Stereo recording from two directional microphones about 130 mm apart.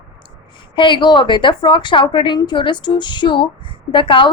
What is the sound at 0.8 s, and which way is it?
A woman's voice, 40° left (ahead or behind).